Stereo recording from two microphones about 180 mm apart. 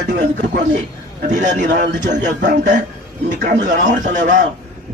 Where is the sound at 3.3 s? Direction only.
45° right (ahead or behind).